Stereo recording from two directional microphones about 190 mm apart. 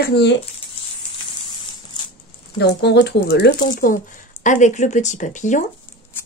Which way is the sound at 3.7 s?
45° left (ahead or behind).